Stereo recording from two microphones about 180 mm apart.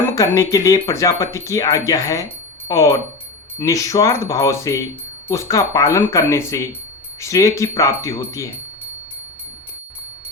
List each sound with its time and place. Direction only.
0.2 s speech: 20° left (ahead or behind)